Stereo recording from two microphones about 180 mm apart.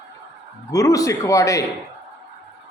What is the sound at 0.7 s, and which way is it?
Speech, 20° left (ahead or behind).